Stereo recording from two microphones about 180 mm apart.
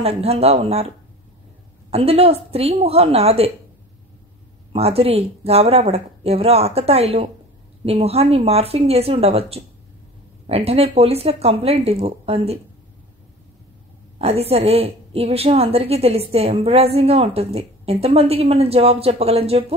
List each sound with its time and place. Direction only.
0.0 s a woman's voice: 35° right (ahead or behind)
4.7 s a woman's voice: 35° right (ahead or behind)
14.1 s a woman's voice: 35° right (ahead or behind)